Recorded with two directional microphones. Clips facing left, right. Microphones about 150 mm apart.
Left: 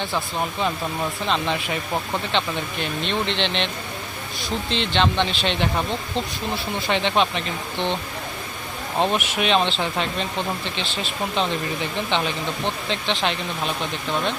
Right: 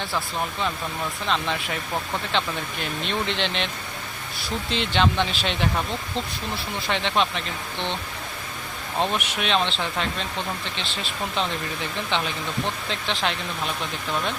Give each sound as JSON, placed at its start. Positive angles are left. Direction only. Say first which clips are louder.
{"t": 1.3, "sound": "speech", "louder": "left 1 dB", "side_deg": 0}
{"t": 4.7, "sound": "speech", "louder": "left 1 dB", "side_deg": -10}
{"t": 6.8, "sound": "speech", "louder": "left 3 dB", "side_deg": 0}
{"t": 9.1, "sound": "speech", "louder": "left 4 dB", "side_deg": 0}